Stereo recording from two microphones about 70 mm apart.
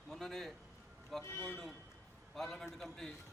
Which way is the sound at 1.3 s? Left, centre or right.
Left.